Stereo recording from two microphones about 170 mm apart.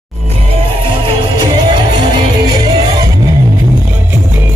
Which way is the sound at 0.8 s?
30° right (ahead or behind).